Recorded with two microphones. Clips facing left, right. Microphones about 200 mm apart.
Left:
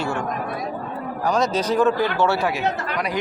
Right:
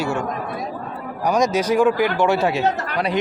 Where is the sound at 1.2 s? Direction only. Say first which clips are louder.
Right 3 dB; 15° right (ahead or behind); by 3.1 s 30° right (ahead or behind).